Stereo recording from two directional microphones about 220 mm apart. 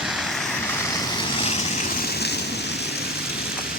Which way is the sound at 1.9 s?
45° left (ahead or behind).